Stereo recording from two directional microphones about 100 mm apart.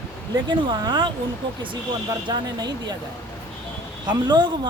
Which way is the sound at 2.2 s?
50° right (ahead or behind).